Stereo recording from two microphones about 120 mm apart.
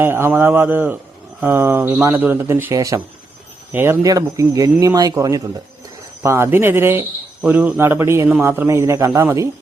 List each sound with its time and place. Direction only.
0.0 s speech: 20° right (ahead or behind)
3.7 s speech: 20° right (ahead or behind)
4.0 s speech: 30° right (ahead or behind)